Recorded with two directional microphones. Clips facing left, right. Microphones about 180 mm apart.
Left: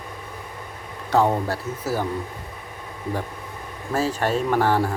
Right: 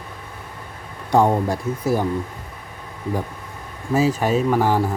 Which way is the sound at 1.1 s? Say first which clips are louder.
Right 3 dB; 15° right (ahead or behind).